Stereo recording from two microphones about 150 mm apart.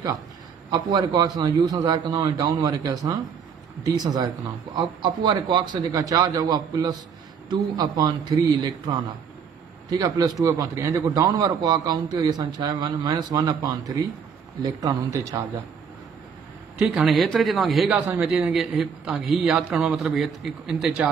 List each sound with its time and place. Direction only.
0.7 s a man's voice: 30° right (ahead or behind)
16.7 s a man's voice: centre (ahead or behind)
17.9 s a man's voice: 10° right (ahead or behind)